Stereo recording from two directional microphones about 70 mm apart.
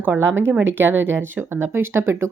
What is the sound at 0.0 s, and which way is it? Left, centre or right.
Speech, right.